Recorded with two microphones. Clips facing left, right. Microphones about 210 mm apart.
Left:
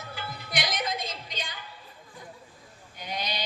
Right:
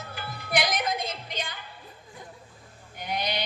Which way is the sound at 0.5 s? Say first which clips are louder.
Right 5 dB; 55° right (ahead or behind).